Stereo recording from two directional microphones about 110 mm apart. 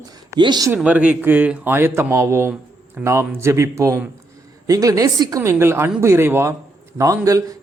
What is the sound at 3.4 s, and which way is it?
A man's voice, 25° right (ahead or behind).